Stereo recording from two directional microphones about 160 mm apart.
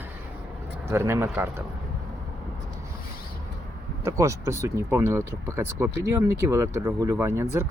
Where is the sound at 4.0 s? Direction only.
20° right (ahead or behind).